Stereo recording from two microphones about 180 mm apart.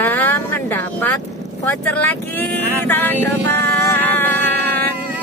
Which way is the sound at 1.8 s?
10° left (ahead or behind).